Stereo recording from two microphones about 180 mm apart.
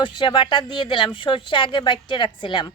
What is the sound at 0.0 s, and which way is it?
Speech, 25° left (ahead or behind).